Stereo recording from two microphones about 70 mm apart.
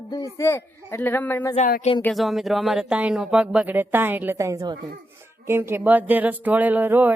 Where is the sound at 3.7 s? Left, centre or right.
Right.